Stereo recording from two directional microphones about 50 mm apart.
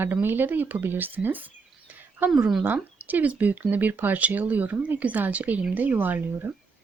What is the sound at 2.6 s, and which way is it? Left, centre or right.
Speech, right.